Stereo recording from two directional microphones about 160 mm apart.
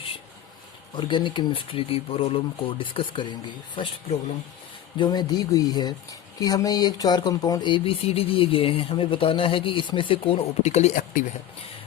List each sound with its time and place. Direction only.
0.9 s speech: 30° left (ahead or behind)
4.9 s speech: 25° left (ahead or behind); by 11.2 s 50° left (ahead or behind)